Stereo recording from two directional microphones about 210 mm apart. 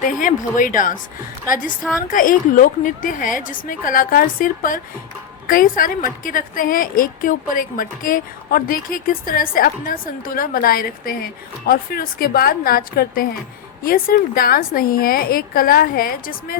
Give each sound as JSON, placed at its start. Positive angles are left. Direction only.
{"t": 0.0, "sound": "a woman's voice", "side_deg": 40}